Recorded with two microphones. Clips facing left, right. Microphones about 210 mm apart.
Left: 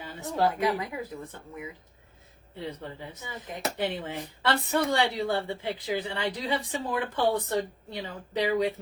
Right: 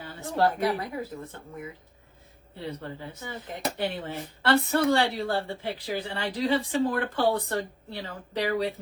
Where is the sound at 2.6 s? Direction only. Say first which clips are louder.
Right 1 dB; 20° left (ahead or behind).